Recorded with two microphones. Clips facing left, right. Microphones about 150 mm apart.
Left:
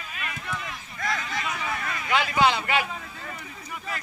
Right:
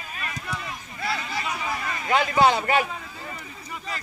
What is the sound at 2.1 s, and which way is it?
Speech, 40° right (ahead or behind).